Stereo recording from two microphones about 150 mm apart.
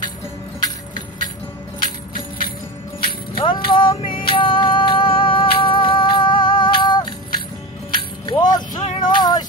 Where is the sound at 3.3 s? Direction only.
35° left (ahead or behind).